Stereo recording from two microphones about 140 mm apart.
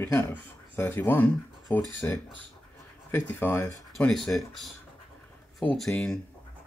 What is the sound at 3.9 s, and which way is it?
Speech, 5° left (ahead or behind).